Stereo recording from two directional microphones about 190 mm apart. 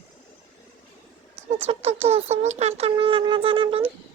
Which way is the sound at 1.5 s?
30° right (ahead or behind).